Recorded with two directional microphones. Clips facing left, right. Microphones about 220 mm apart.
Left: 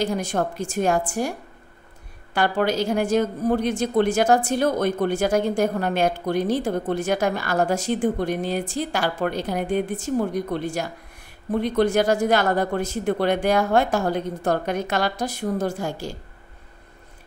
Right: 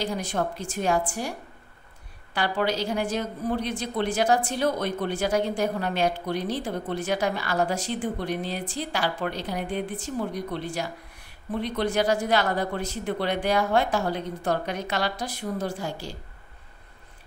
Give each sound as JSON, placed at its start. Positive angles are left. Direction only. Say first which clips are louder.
{"t": 0.0, "sound": "a woman's voice", "louder": "left 4 dB", "side_deg": 45}
{"t": 2.3, "sound": "a woman's voice", "louder": "left 5 dB", "side_deg": 50}